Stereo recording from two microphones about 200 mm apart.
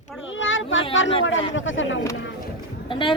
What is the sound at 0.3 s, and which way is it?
Child singing, 70° left (ahead or behind).